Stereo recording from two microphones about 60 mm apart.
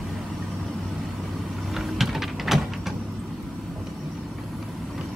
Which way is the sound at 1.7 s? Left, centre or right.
Centre.